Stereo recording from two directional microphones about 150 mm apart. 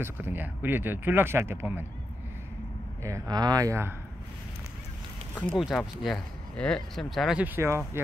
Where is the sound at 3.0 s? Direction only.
25° right (ahead or behind).